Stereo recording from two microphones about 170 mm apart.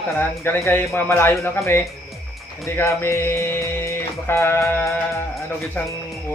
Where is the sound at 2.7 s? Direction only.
15° left (ahead or behind).